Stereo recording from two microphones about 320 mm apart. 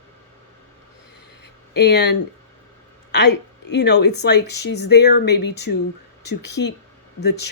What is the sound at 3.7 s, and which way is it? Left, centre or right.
Speech, left.